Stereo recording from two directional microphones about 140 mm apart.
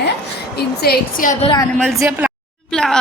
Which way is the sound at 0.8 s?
75° left (ahead or behind).